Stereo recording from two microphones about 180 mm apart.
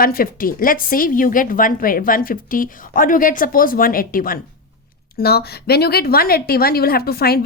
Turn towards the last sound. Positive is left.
turn(degrees=60)  # may be behind; listen again after turning